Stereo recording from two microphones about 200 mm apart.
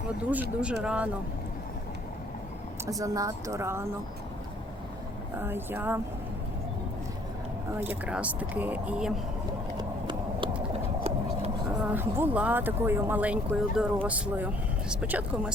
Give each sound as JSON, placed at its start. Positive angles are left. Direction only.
{"t": 0.2, "sound": "speech", "side_deg": -5}
{"t": 3.0, "sound": "speech", "side_deg": -15}
{"t": 5.4, "sound": "speech", "side_deg": -10}
{"t": 7.8, "sound": "speech", "side_deg": -10}
{"t": 9.7, "sound": "run", "side_deg": -20}
{"t": 11.8, "sound": "speech", "side_deg": -10}